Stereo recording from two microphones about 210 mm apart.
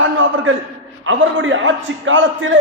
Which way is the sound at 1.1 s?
65° right (ahead or behind).